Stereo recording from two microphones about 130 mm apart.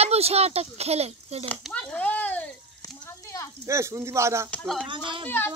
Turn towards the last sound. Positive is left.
turn(degrees=15)  # may be behind; listen again after turning